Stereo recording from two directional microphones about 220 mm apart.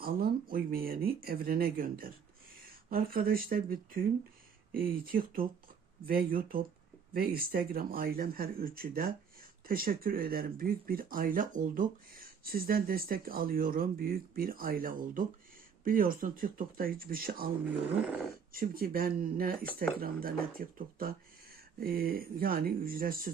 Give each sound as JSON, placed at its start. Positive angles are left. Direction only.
{"t": 0.0, "sound": "speech", "side_deg": -40}
{"t": 18.5, "sound": "speech", "side_deg": -40}